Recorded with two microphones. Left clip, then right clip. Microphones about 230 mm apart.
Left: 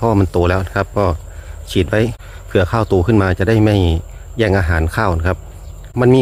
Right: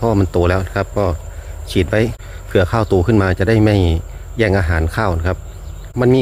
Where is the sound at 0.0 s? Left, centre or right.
Centre.